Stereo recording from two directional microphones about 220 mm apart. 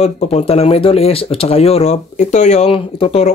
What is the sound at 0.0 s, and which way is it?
Speech, 30° left (ahead or behind).